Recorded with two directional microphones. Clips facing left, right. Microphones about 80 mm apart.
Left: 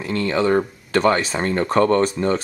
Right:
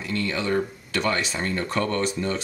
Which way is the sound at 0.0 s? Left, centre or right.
Left.